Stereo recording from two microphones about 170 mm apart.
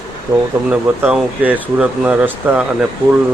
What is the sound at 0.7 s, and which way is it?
Speech, 10° right (ahead or behind).